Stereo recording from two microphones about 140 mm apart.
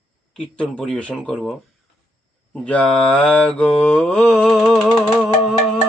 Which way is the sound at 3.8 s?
5° left (ahead or behind).